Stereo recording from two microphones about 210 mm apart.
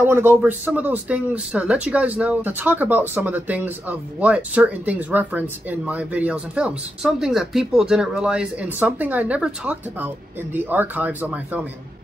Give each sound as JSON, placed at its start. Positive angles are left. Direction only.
{"t": 0.0, "sound": "speech", "side_deg": -10}